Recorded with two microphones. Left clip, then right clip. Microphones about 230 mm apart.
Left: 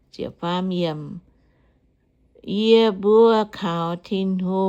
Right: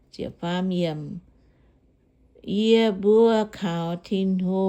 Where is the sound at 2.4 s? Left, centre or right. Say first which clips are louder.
Left 4 dB; centre.